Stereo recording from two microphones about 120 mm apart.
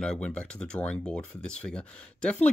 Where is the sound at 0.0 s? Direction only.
5° left (ahead or behind).